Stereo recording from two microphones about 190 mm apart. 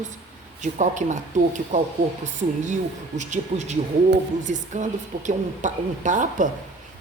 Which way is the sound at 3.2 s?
40° right (ahead or behind).